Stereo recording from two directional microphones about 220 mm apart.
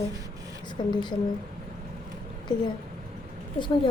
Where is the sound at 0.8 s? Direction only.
25° left (ahead or behind).